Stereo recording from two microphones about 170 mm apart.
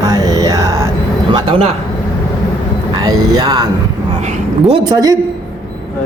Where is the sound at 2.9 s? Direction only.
25° right (ahead or behind).